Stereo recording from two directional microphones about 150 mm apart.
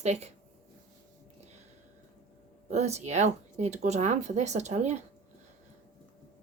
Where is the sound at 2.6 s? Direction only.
45° right (ahead or behind).